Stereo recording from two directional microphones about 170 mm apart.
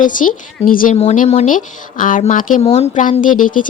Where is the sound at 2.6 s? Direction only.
40° left (ahead or behind).